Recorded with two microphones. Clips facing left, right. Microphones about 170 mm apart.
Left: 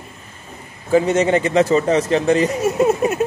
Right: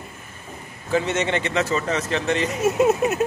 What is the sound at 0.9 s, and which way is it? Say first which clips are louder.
Speech: left 7 dB; 30° left (ahead or behind).